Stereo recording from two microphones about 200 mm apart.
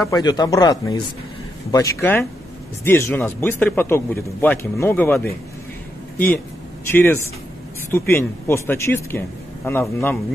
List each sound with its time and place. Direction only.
0.0 s a man's voice: 20° left (ahead or behind)
6.9 s speech: 10° left (ahead or behind)